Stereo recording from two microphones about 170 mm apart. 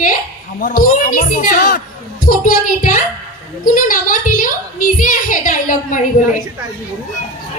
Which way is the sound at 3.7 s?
50° left (ahead or behind).